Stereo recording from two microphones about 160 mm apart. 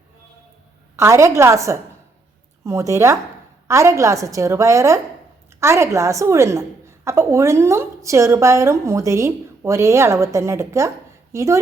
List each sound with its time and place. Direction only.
0.9 s a woman's voice: 20° right (ahead or behind)